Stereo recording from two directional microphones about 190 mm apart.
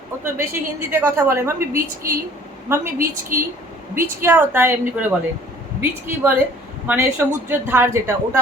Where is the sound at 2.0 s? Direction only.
50° right (ahead or behind).